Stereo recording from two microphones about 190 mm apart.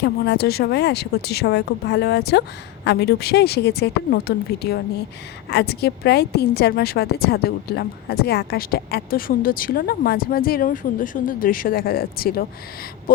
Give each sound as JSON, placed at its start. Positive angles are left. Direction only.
{"t": 0.0, "sound": "a woman's voice", "side_deg": 60}